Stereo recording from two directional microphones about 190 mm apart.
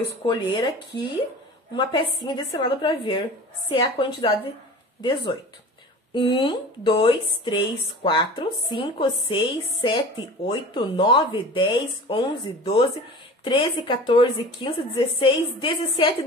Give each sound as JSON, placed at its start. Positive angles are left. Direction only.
{"t": 0.3, "sound": "speech", "side_deg": 20}